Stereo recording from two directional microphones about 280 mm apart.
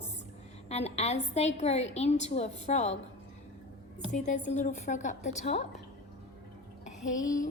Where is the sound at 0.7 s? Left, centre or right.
Left.